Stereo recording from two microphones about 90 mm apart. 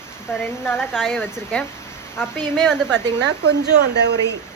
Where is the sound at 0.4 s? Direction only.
25° left (ahead or behind).